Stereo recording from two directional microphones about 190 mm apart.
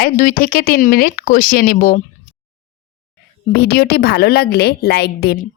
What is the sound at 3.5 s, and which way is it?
Speech, 55° left (ahead or behind).